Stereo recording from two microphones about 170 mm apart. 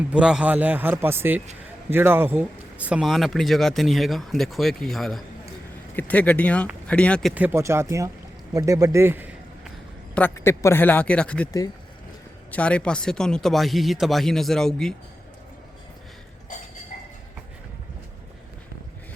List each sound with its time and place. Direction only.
0.1 s a man's voice: 5° right (ahead or behind)
7.3 s a man's voice: 10° right (ahead or behind)
8.5 s a sound: 20° right (ahead or behind)
10.2 s a man's voice: 10° left (ahead or behind)
12.5 s speech: 5° left (ahead or behind)